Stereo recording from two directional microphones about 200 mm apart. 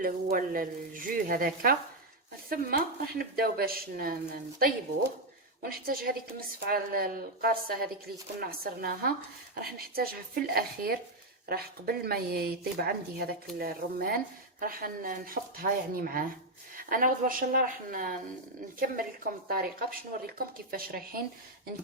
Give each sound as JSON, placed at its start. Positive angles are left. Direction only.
{"t": 0.0, "sound": "speech", "side_deg": -45}